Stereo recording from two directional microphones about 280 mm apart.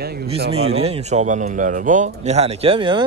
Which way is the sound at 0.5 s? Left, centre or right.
Right.